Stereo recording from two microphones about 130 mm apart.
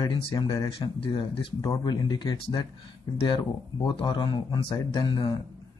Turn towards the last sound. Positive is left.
turn(degrees=35)  # may be behind; listen again after turning